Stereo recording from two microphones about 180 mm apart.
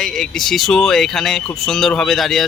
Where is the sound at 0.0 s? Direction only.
Centre (ahead or behind).